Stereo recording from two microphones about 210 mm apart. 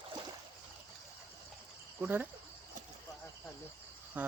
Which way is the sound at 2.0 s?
10° right (ahead or behind).